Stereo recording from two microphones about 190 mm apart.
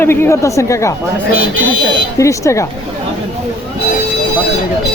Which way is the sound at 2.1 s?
15° left (ahead or behind).